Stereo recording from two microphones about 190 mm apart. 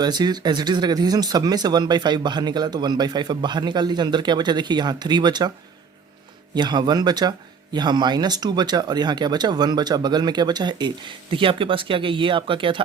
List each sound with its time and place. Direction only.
0.0 s speech: 20° right (ahead or behind)
6.5 s speech: 25° right (ahead or behind)